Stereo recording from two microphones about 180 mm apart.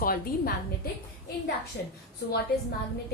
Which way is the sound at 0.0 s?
55° left (ahead or behind).